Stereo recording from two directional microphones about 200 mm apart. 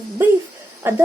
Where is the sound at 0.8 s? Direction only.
10° right (ahead or behind).